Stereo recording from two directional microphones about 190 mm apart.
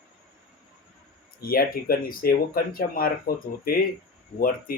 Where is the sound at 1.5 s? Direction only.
50° left (ahead or behind).